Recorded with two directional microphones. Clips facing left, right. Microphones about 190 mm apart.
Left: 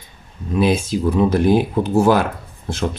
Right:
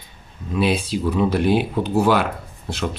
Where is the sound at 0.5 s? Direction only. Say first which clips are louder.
Left 3 dB; 45° left (ahead or behind).